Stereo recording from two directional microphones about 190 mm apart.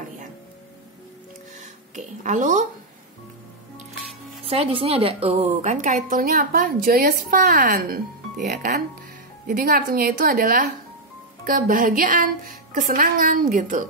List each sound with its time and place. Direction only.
1.6 s speech: 40° right (ahead or behind)
4.5 s a woman's voice: 30° right (ahead or behind)